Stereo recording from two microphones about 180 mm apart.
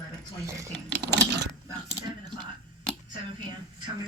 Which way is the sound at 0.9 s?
70° right (ahead or behind).